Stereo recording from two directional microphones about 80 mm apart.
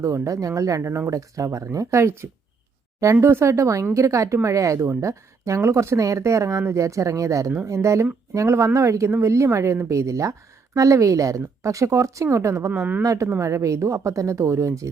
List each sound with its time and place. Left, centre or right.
0.0 s speech: right
12.7 s speech: centre
13.0 s speech: right